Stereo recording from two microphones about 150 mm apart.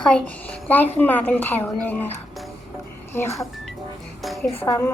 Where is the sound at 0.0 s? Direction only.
10° left (ahead or behind).